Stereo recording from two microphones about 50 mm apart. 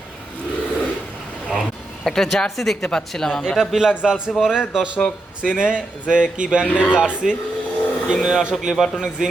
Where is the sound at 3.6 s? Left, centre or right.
Centre.